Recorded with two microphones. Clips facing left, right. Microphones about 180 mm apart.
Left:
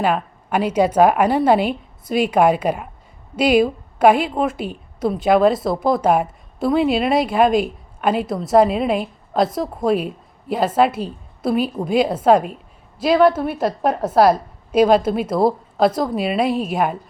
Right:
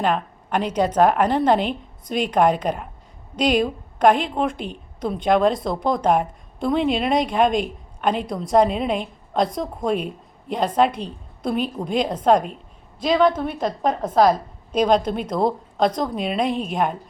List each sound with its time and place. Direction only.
0.0 s a woman's voice: 10° left (ahead or behind)